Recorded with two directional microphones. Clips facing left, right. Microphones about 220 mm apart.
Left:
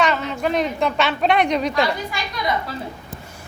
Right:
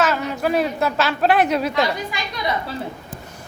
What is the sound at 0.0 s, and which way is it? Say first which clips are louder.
A woman's voice: even; 5° right (ahead or behind).